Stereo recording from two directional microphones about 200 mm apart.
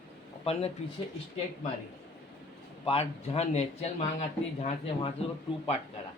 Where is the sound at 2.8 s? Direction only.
30° left (ahead or behind).